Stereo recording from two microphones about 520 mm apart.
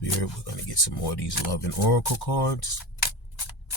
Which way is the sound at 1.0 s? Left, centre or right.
Left.